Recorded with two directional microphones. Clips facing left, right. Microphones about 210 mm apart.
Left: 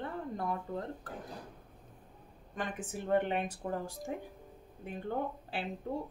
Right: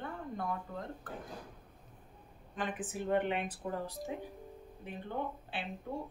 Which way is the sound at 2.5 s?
45° left (ahead or behind).